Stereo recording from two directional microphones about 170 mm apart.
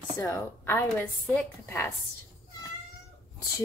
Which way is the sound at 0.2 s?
15° left (ahead or behind).